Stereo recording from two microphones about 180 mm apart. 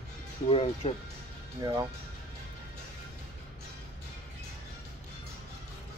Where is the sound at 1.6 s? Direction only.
20° right (ahead or behind).